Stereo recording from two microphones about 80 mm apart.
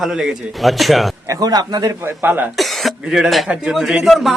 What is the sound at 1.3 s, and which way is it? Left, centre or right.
Speech, right.